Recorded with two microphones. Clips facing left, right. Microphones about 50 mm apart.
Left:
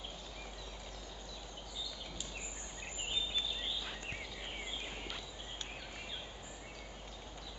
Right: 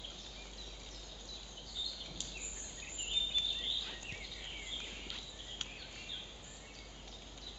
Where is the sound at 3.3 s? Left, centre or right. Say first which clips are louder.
Even; left.